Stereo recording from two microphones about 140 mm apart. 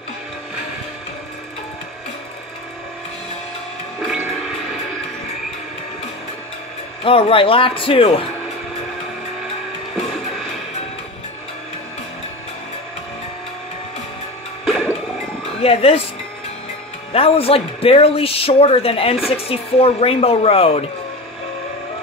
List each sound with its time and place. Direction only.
7.0 s a man's voice: 40° left (ahead or behind)
14.6 s music: centre (ahead or behind)
15.6 s speech: 45° left (ahead or behind)
17.1 s speech: 45° left (ahead or behind)